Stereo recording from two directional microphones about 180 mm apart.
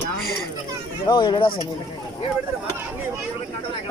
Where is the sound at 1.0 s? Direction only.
25° left (ahead or behind).